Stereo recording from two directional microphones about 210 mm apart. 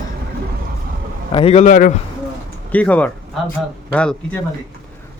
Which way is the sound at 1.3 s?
30° left (ahead or behind).